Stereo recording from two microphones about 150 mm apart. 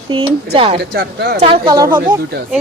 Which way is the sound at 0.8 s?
90° right.